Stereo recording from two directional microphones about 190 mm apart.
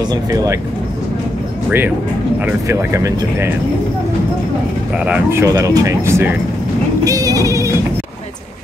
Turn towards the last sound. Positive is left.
turn(degrees=-15)  # may be behind; listen again after turning